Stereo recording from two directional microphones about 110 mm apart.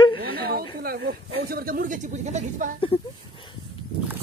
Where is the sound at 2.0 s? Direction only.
90° right.